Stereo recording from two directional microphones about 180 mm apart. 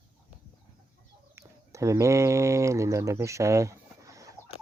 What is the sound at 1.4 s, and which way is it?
Speech, 15° right (ahead or behind).